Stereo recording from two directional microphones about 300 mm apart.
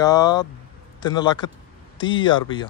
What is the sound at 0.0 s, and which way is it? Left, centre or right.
A man's voice, centre.